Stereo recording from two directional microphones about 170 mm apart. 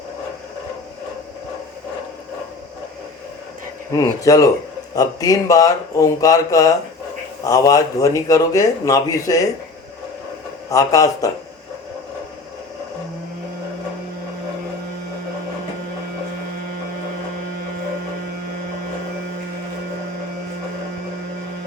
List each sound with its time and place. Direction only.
3.9 s speech: 20° left (ahead or behind)
10.7 s speech: 20° left (ahead or behind)